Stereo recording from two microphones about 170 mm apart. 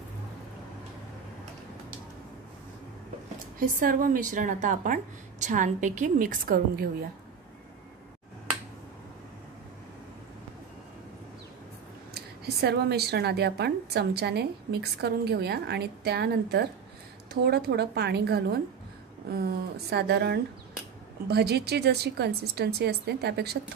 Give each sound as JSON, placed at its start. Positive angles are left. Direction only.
{"t": 3.5, "sound": "a woman's voice", "side_deg": -55}
{"t": 12.1, "sound": "speech", "side_deg": -75}
{"t": 19.9, "sound": "speech", "side_deg": -75}